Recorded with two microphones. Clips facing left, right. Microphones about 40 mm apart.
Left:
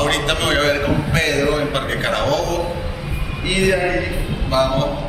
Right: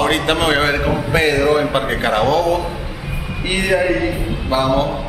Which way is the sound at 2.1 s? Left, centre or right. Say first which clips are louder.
Right 5 dB; right.